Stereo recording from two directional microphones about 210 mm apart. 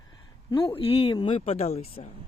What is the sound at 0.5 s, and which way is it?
Speech, 25° left (ahead or behind).